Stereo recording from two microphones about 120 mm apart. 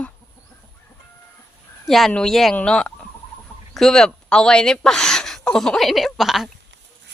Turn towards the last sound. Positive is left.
turn(degrees=0)  # may be behind; listen again after turning